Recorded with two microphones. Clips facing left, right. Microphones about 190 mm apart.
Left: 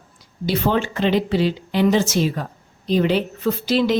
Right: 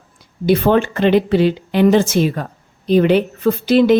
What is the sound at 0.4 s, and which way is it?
A woman's voice, 55° right (ahead or behind).